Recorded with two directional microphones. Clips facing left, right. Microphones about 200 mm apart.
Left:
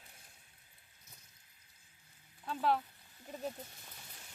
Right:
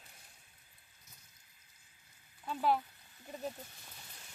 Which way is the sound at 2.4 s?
5° right (ahead or behind).